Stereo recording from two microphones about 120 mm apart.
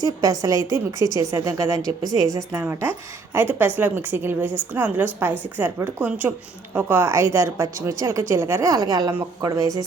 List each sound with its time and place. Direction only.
0.0 s a woman's voice: 30° right (ahead or behind)
2.5 s a woman's voice: 15° right (ahead or behind)
8.7 s a woman's voice: 30° right (ahead or behind)